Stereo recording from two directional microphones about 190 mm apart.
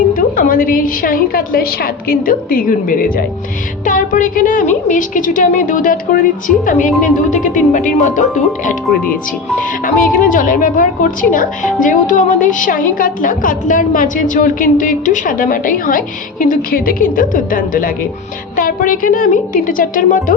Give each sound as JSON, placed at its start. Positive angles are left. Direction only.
{"t": 0.1, "sound": "a woman's voice", "side_deg": 45}
{"t": 6.7, "sound": "music", "side_deg": 40}
{"t": 9.6, "sound": "a woman's voice", "side_deg": 45}